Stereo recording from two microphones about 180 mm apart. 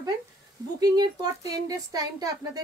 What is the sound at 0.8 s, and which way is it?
Speech, 20° right (ahead or behind).